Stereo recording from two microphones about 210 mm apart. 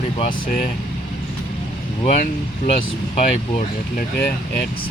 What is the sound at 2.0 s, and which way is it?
Speech, 35° left (ahead or behind).